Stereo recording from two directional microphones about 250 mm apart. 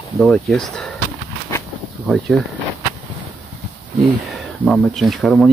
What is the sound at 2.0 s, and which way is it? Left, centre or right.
Speech, centre.